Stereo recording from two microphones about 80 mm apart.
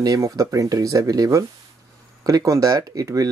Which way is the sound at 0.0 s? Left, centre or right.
Right.